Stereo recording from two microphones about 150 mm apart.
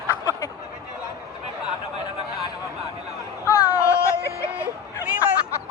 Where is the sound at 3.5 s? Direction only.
20° left (ahead or behind).